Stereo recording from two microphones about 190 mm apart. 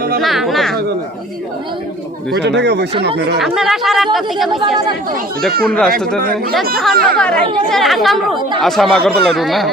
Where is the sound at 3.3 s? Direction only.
Centre (ahead or behind).